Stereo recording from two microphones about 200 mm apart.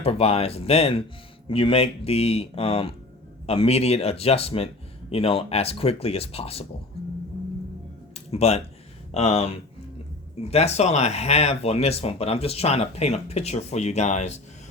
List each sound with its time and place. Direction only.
0.0 s speech: 30° left (ahead or behind)
8.1 s music: 30° left (ahead or behind)
9.1 s speech: 30° left (ahead or behind)